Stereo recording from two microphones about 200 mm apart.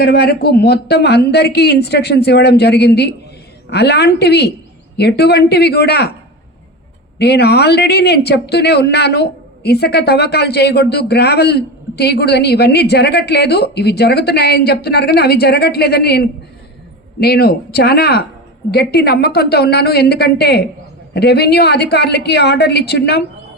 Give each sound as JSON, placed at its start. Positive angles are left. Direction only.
{"t": 0.0, "sound": "speech", "side_deg": 50}
{"t": 7.2, "sound": "a woman's voice", "side_deg": 55}